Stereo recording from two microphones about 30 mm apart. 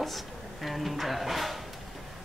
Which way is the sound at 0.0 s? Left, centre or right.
Centre.